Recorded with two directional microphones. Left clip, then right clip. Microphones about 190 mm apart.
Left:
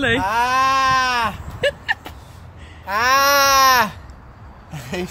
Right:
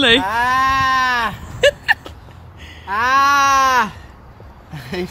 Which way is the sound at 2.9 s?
50° left (ahead or behind).